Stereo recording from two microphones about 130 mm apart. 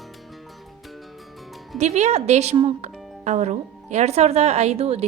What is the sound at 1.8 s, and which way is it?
Speech, 60° right (ahead or behind).